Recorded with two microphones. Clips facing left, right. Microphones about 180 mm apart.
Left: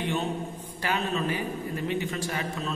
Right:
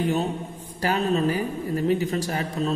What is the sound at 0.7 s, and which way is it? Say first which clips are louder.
A woman's voice: right 6 dB; 40° right (ahead or behind).